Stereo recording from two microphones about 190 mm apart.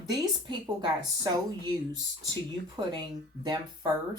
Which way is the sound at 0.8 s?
20° right (ahead or behind).